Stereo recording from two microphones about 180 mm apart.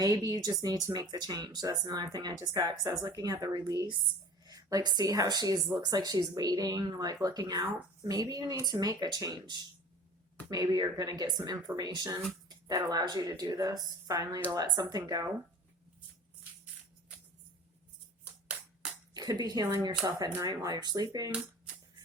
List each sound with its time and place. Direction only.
0.3 s a woman's voice: 20° right (ahead or behind)
19.1 s speech: 20° right (ahead or behind)